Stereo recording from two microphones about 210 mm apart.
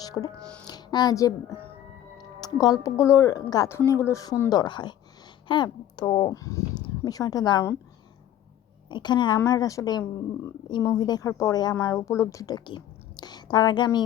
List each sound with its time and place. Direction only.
0.0 s music: 20° left (ahead or behind)
0.7 s speech: 20° left (ahead or behind)
2.1 s music: 20° left (ahead or behind)
2.8 s speech: 15° left (ahead or behind)
8.9 s speech: 20° left (ahead or behind)